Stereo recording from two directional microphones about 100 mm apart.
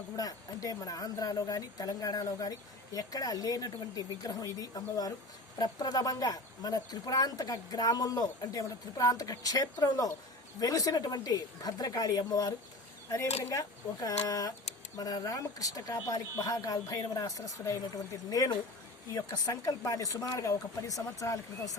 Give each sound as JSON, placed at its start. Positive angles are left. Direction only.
{"t": 0.2, "sound": "speech", "side_deg": 40}